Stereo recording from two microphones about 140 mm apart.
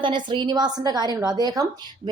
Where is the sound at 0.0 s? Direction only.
35° right (ahead or behind).